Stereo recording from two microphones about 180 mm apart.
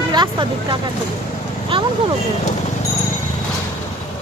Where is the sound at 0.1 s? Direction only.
25° right (ahead or behind).